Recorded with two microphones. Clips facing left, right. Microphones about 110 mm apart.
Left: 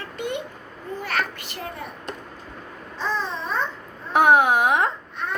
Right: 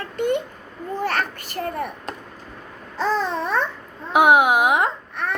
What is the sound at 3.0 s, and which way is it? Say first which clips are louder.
Babbling: right 5 dB; 70° right (ahead or behind).